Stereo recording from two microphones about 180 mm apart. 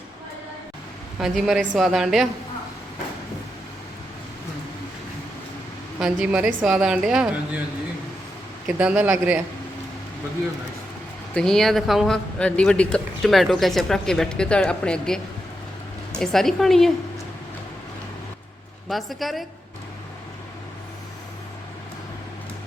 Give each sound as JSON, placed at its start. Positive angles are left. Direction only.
{"t": 1.2, "sound": "a man's voice", "side_deg": 0}
{"t": 6.0, "sound": "a man's voice", "side_deg": -5}
{"t": 8.6, "sound": "a man's voice", "side_deg": -5}
{"t": 11.3, "sound": "a man's voice", "side_deg": 5}
{"t": 18.9, "sound": "a man's voice", "side_deg": 0}